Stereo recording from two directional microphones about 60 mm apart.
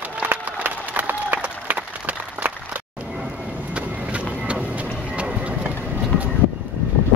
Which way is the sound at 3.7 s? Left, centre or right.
Right.